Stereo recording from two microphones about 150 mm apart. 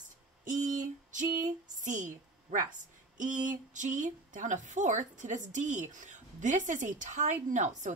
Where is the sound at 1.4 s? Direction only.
60° right (ahead or behind).